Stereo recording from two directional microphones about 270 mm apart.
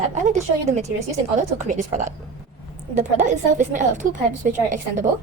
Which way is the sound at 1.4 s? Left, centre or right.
Right.